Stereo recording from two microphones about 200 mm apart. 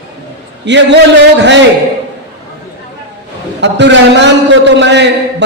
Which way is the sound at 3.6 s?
60° right (ahead or behind).